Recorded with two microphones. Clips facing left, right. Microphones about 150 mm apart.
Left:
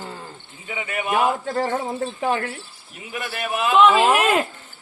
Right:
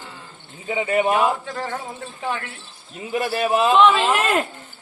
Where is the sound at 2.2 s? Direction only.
40° left (ahead or behind).